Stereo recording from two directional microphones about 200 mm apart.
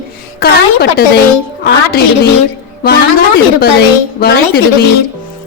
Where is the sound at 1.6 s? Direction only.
50° left (ahead or behind).